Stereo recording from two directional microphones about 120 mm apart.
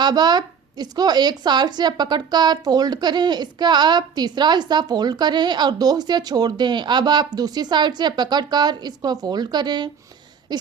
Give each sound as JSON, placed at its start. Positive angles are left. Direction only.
{"t": 0.0, "sound": "speech", "side_deg": -35}